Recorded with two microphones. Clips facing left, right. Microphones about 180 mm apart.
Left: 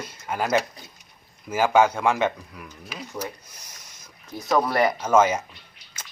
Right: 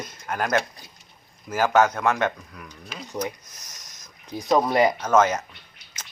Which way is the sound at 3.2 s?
10° left (ahead or behind).